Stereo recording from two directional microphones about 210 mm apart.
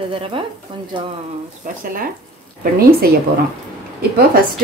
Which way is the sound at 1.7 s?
40° right (ahead or behind).